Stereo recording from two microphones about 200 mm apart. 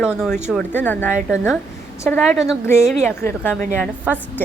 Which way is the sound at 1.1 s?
5° right (ahead or behind).